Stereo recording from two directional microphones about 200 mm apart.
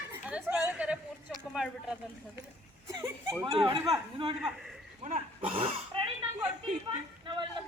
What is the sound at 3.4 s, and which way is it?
Speech, 25° right (ahead or behind).